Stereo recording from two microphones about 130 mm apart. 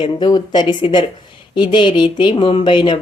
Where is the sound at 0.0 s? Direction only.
35° left (ahead or behind).